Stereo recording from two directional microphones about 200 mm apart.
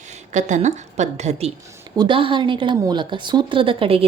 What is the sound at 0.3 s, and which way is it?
A woman's voice, 35° right (ahead or behind).